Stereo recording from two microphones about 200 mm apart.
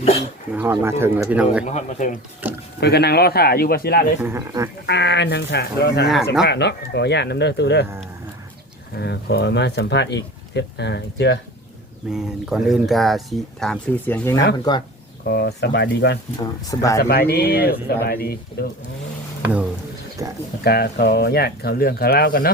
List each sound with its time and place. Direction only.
0.5 s speech: 10° right (ahead or behind)
1.6 s speech: 35° left (ahead or behind)
2.4 s speech: 10° right (ahead or behind)
2.8 s speech: 55° left (ahead or behind)
4.2 s speech: 15° right (ahead or behind)
4.9 s speech: 60° left (ahead or behind)
9.0 s speech: 55° left (ahead or behind)
12.1 s speech: 5° right (ahead or behind)
15.3 s speech: 55° left (ahead or behind)
16.4 s speech: 15° left (ahead or behind)
17.0 s speech: 50° left (ahead or behind)
20.2 s speech: 15° right (ahead or behind)
20.7 s speech: 50° left (ahead or behind)